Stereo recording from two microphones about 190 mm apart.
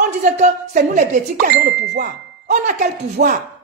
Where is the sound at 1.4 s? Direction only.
60° right (ahead or behind).